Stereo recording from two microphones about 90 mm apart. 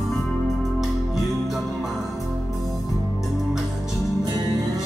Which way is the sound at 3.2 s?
5° right (ahead or behind).